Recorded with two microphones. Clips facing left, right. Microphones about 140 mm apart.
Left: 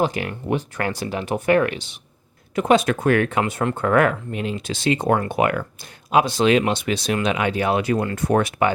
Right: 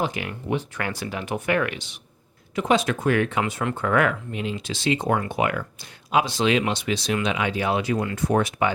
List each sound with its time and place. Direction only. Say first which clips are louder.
0.0 s speech: left 5 dB; 40° left (ahead or behind)
2.6 s speech: left 4 dB; 55° left (ahead or behind)